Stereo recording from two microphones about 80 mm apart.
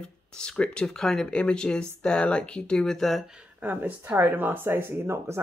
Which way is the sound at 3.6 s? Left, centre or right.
Right.